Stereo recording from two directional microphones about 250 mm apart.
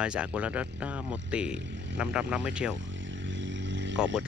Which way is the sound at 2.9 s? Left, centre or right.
Right.